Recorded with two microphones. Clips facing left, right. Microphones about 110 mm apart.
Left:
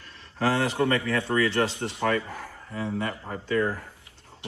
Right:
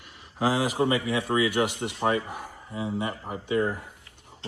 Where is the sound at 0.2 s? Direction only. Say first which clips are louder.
Even; 65° left (ahead or behind).